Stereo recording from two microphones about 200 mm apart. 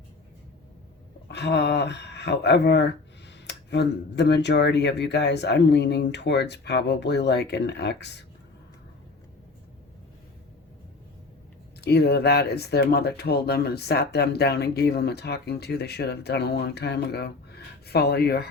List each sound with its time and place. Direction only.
1.3 s speech: 55° left (ahead or behind)
11.8 s speech: 55° left (ahead or behind)